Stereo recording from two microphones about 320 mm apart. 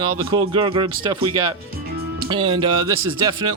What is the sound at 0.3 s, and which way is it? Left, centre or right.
Speech, centre.